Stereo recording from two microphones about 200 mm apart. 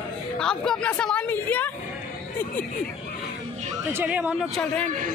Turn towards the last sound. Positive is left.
turn(degrees=0)  # may be behind; listen again after turning